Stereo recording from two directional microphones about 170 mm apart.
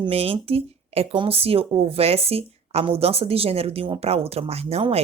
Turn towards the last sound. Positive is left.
turn(degrees=-35)  # may be behind; listen again after turning